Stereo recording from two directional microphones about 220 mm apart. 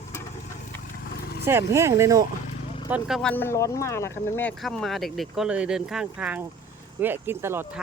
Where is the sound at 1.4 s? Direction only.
10° right (ahead or behind).